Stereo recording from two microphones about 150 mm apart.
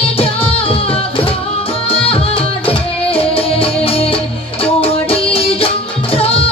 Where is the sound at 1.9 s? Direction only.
40° left (ahead or behind).